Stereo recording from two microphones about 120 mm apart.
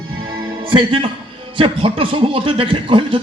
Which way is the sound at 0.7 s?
45° right (ahead or behind).